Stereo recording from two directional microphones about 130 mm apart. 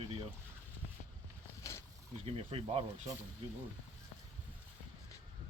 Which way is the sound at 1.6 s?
25° left (ahead or behind).